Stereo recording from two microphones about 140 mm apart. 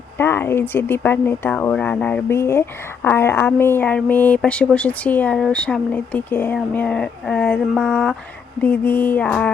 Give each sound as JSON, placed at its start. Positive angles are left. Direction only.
{"t": 0.2, "sound": "speech", "side_deg": 15}